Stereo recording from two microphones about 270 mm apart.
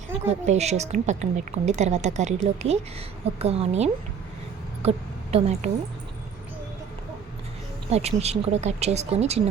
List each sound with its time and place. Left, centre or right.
0.3 s a woman's voice: right
7.9 s a woman's voice: right